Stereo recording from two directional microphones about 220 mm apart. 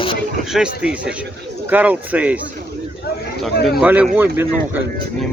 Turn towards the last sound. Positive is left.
turn(degrees=-10)  # may be behind; listen again after turning